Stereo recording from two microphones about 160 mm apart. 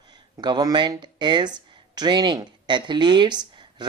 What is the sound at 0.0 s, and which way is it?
Speech, 25° right (ahead or behind).